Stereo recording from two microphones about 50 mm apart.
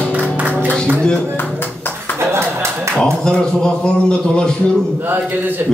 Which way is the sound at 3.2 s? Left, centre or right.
Centre.